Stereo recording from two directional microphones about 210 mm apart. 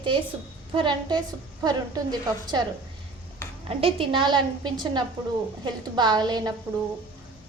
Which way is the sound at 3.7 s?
25° right (ahead or behind).